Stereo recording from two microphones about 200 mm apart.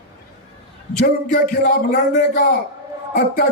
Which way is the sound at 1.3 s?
45° left (ahead or behind).